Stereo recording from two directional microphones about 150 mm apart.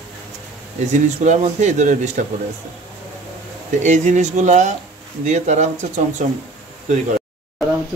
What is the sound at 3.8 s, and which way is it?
Speech, 50° right (ahead or behind).